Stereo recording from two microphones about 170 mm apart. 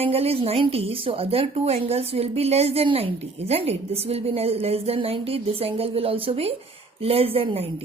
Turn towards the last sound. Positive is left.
turn(degrees=-35)  # may be behind; listen again after turning